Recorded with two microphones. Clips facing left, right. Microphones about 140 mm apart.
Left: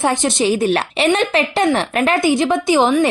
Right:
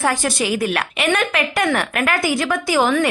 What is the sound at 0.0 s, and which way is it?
Speech, 25° left (ahead or behind).